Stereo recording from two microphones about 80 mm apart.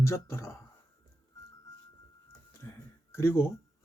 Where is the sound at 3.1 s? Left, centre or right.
Left.